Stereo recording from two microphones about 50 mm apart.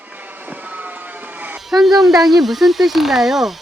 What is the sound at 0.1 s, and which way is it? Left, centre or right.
Vehicle, right.